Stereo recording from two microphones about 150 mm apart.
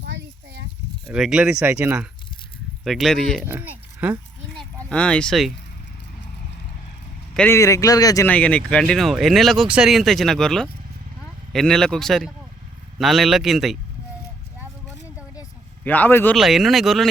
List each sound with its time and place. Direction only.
1.1 s speech: 5° right (ahead or behind)
2.8 s speech: centre (ahead or behind)
3.4 s speech: 10° right (ahead or behind)
4.9 s speech: 5° left (ahead or behind)
7.3 s speech: 15° left (ahead or behind)
8.3 s speech: 10° left (ahead or behind)
15.8 s speech: 10° left (ahead or behind)
16.3 s speech: centre (ahead or behind)